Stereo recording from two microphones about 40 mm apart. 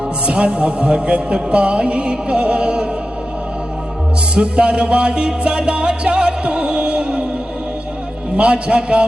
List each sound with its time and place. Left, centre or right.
0.3 s music: right
4.4 s music: right
8.4 s music: right